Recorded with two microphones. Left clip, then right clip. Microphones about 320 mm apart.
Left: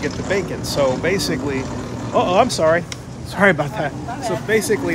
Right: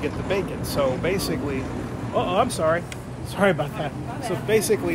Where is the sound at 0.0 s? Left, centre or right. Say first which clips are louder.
Left 4 dB; centre.